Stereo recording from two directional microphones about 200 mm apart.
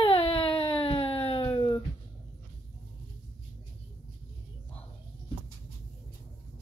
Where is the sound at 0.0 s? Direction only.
30° left (ahead or behind).